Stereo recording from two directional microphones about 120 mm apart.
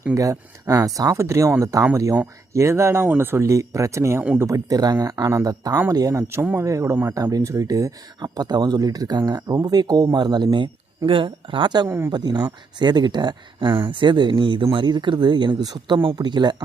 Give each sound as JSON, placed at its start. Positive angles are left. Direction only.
{"t": 0.1, "sound": "speech", "side_deg": -30}
{"t": 11.9, "sound": "speech", "side_deg": -20}
{"t": 12.1, "sound": "speech", "side_deg": -35}